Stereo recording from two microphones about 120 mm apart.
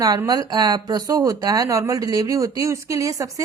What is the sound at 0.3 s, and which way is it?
Speech, 35° right (ahead or behind).